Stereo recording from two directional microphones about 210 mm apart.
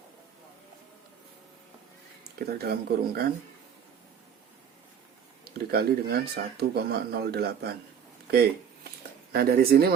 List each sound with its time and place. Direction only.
2.5 s speech: 45° right (ahead or behind)
5.5 s speech: 45° right (ahead or behind)
8.3 s a sound: 50° right (ahead or behind)
9.3 s speech: 45° right (ahead or behind)